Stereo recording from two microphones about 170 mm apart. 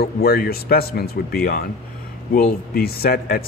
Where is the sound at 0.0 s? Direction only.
65° left (ahead or behind).